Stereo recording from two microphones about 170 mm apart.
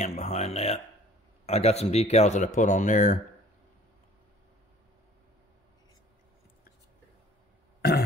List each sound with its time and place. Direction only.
0.0 s speech: 40° left (ahead or behind)